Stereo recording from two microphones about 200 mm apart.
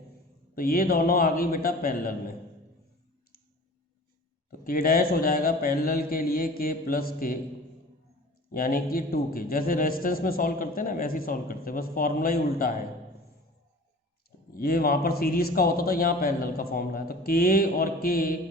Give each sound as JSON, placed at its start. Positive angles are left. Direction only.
{"t": 0.5, "sound": "a man's voice", "side_deg": 45}
{"t": 4.5, "sound": "a man's voice", "side_deg": 45}
{"t": 8.5, "sound": "a man's voice", "side_deg": 45}
{"t": 14.5, "sound": "a man's voice", "side_deg": 45}